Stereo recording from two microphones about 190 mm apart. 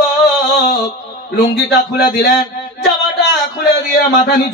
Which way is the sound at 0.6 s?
50° left (ahead or behind).